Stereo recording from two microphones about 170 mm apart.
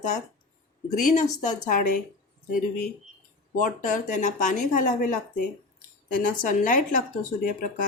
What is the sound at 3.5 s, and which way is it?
A woman's voice, 50° left (ahead or behind).